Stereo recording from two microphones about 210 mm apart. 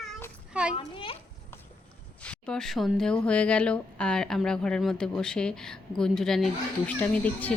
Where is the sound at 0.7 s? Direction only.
25° left (ahead or behind).